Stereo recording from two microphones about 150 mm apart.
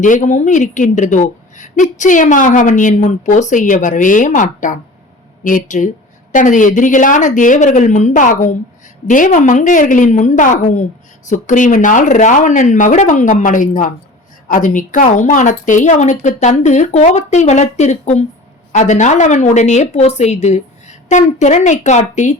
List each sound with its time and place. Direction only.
0.0 s a woman's voice: 55° left (ahead or behind)